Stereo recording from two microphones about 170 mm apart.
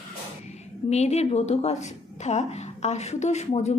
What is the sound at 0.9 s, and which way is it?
A woman's voice, 40° left (ahead or behind).